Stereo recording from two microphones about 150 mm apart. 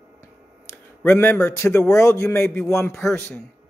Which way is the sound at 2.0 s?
20° left (ahead or behind).